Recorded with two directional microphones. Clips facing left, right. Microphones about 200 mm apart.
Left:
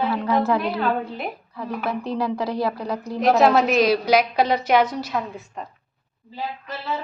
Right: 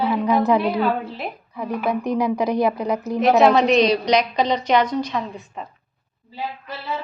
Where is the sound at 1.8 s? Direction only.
15° right (ahead or behind).